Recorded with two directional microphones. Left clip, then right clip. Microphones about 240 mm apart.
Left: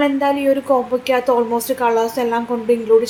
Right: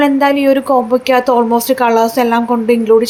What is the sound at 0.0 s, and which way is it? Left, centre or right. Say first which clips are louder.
A woman's voice: right 5 dB; right.